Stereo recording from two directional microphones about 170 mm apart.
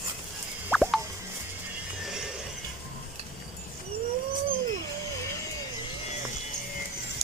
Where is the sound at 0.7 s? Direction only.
Centre (ahead or behind).